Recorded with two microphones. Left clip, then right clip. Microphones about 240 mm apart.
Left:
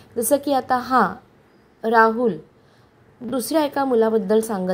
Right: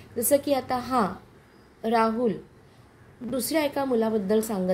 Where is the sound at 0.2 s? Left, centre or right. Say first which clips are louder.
Left 4 dB; left.